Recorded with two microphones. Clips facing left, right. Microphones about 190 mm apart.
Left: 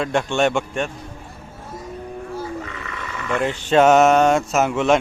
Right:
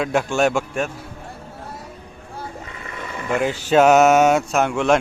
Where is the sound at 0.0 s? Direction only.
5° right (ahead or behind).